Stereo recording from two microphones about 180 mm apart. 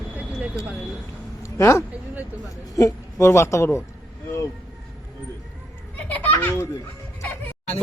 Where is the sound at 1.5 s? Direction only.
15° left (ahead or behind).